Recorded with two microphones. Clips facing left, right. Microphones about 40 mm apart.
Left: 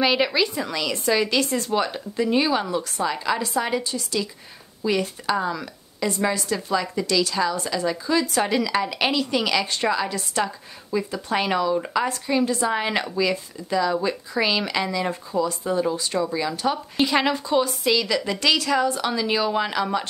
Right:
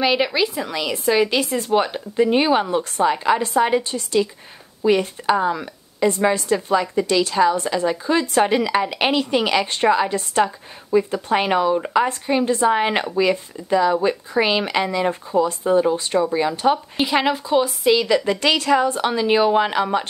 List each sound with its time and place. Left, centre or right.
0.0 s a woman's voice: centre; by 16.8 s right
16.9 s a woman's voice: centre
17.9 s a woman's voice: right